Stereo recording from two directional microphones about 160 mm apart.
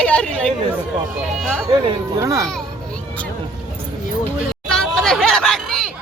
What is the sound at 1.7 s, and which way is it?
Speech, 25° right (ahead or behind).